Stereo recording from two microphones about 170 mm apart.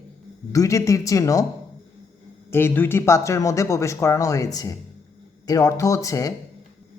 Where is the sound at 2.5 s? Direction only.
15° left (ahead or behind).